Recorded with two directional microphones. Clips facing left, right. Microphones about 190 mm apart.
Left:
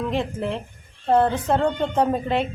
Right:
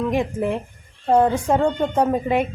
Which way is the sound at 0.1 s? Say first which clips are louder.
Right 4 dB; 15° right (ahead or behind).